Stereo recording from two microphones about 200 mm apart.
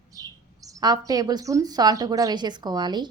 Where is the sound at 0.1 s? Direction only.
15° right (ahead or behind).